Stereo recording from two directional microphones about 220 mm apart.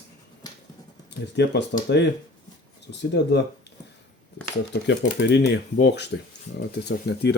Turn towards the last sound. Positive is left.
turn(degrees=50)  # may be behind; listen again after turning